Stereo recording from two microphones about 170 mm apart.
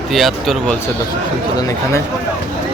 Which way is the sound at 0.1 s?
Centre (ahead or behind).